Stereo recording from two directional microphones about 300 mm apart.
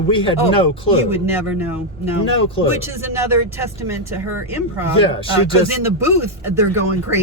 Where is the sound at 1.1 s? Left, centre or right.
Centre.